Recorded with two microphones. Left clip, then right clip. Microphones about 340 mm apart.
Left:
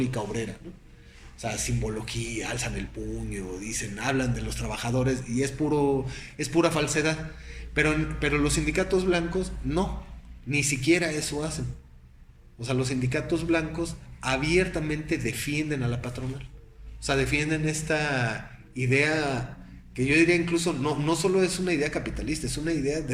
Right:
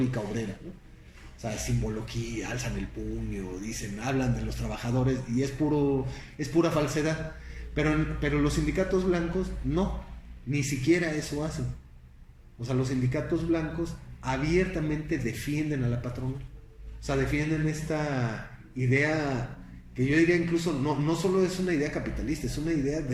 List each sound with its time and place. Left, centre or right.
0.0 s a man's voice: left
3.0 s speech: left
3.5 s a man's voice: left
12.5 s a man's voice: left